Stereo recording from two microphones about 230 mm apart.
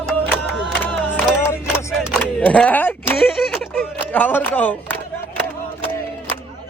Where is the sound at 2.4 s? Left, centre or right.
Centre.